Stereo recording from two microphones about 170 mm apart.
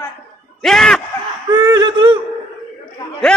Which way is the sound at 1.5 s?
25° right (ahead or behind).